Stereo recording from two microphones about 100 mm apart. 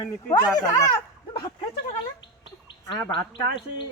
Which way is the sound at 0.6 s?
35° left (ahead or behind).